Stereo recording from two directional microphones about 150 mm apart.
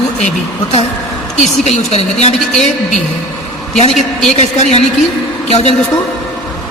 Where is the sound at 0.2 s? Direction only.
50° left (ahead or behind).